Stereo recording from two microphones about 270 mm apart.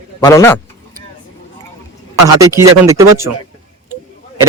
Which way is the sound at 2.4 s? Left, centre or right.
Centre.